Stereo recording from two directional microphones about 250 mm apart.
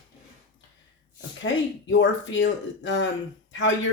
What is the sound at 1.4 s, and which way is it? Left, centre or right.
Speech, left.